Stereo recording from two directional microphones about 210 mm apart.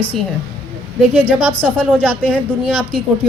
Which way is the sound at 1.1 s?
10° right (ahead or behind).